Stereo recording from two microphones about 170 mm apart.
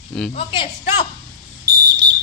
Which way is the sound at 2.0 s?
90° right.